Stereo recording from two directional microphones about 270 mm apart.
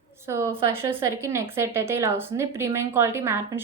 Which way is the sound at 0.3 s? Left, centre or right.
Centre.